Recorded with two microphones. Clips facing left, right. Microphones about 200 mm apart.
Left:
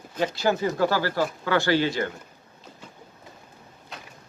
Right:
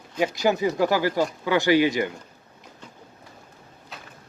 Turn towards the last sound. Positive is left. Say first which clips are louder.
# left 1 dB
turn(degrees=0)  # may be behind; listen again after turning